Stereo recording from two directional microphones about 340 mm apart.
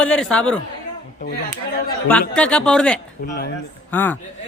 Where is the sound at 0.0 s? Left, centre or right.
Centre.